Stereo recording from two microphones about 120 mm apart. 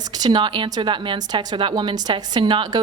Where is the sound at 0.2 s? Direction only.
40° right (ahead or behind).